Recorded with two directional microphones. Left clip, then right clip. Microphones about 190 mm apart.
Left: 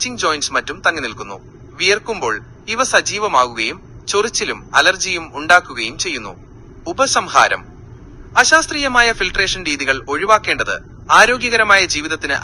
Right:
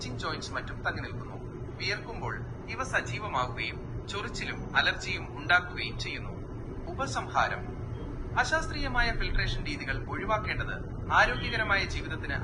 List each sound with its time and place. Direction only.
0.0 s a man's voice: 55° left (ahead or behind)